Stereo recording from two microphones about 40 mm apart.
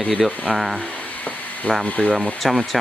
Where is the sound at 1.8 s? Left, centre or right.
Left.